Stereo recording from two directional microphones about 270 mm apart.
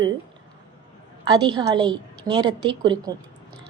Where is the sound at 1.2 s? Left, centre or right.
Centre.